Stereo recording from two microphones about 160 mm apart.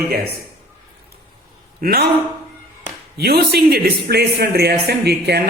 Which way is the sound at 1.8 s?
75° right (ahead or behind).